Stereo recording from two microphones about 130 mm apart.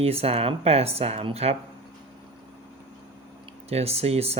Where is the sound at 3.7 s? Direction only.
50° right (ahead or behind).